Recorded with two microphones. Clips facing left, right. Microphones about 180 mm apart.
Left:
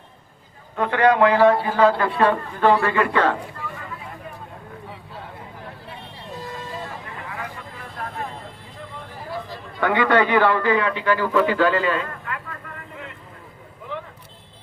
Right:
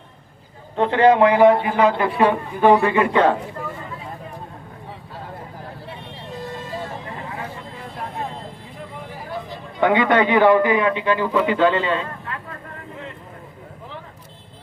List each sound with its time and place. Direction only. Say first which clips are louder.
0.8 s a man's voice: right 3 dB; 25° right (ahead or behind)
7.2 s vehicle: right 2 dB; 30° right (ahead or behind)
9.8 s a man's voice: right 2 dB; 20° right (ahead or behind)